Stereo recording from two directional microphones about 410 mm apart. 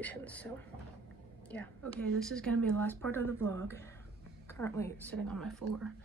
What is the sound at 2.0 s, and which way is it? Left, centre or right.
Speech, centre.